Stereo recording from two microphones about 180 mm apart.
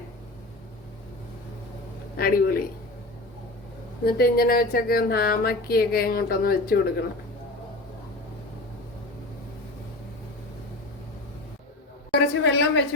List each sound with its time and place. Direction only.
2.1 s speech: 60° left (ahead or behind)
4.0 s speech: 55° left (ahead or behind)
12.3 s a sound: 75° left (ahead or behind)